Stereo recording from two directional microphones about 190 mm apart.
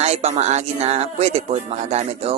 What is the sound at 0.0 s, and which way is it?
Speech, 35° right (ahead or behind).